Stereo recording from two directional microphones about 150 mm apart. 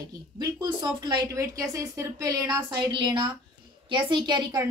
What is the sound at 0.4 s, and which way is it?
A woman's voice, 25° right (ahead or behind).